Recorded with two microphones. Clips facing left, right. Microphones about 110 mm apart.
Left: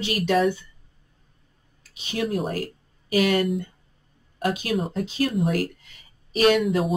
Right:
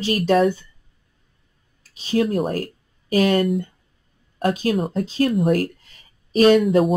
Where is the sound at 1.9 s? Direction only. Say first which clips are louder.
Right 6 dB; 35° right (ahead or behind).